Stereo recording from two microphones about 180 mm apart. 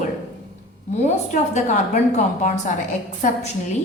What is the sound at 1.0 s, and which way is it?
A woman's voice, 40° left (ahead or behind).